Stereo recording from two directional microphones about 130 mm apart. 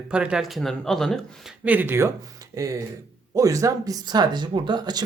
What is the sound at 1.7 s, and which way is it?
Speech, 15° right (ahead or behind).